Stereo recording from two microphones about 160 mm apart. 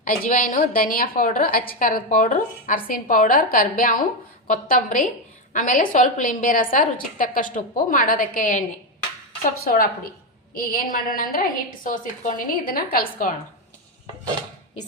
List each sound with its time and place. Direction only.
0.0 s a woman's voice: 55° left (ahead or behind)
9.6 s a woman's voice: 60° left (ahead or behind)